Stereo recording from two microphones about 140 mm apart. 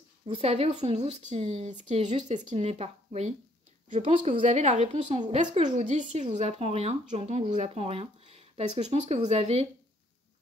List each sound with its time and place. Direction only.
0.3 s a woman's voice: 45° right (ahead or behind)
4.1 s a woman's voice: 35° right (ahead or behind)
4.4 s a woman's voice: 60° right (ahead or behind)